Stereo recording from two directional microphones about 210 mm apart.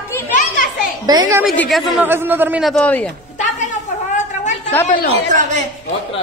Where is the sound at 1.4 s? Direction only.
Centre (ahead or behind).